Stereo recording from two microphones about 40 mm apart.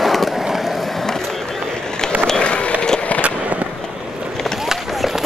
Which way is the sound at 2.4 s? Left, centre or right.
Left.